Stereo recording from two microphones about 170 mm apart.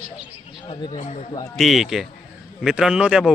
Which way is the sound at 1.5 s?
Centre (ahead or behind).